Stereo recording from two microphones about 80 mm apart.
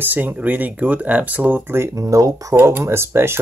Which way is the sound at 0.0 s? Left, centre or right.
Right.